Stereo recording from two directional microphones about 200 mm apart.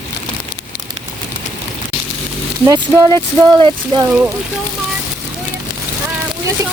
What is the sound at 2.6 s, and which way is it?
Speech, 20° right (ahead or behind).